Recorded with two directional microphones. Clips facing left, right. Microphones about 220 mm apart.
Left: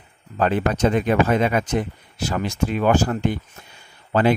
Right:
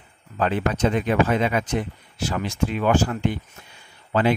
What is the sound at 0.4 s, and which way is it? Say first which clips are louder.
Speech: left 2 dB; 45° left (ahead or behind).